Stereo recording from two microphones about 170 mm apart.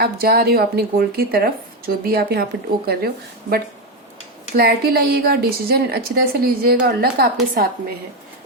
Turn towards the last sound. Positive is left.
turn(degrees=-60)  # may be behind; listen again after turning